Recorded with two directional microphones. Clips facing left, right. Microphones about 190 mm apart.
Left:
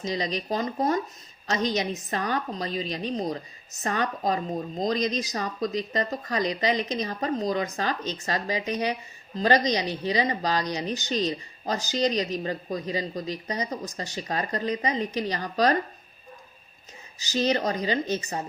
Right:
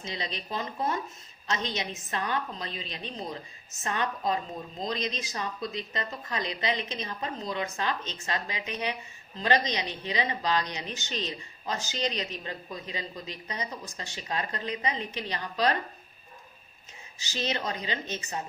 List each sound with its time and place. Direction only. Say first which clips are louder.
0.0 s speech: left 8 dB; 40° left (ahead or behind)
17.2 s speech: left 8 dB; 40° left (ahead or behind)